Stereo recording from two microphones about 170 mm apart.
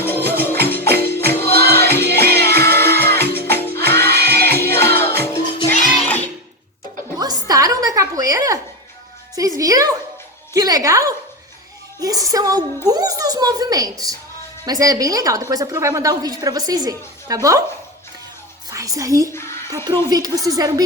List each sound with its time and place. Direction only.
0.0 s music: 10° left (ahead or behind)
7.2 s a sound: 20° right (ahead or behind)
9.3 s music: 20° right (ahead or behind)
12.9 s a sound: 20° right (ahead or behind)
14.6 s a woman's voice: 20° right (ahead or behind)
18.7 s a woman's voice: 20° right (ahead or behind)
19.3 s speech: 15° left (ahead or behind)
19.7 s a woman's voice: 25° right (ahead or behind)